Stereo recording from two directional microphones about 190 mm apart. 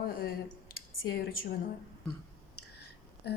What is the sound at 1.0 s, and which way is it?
Speech, 55° left (ahead or behind).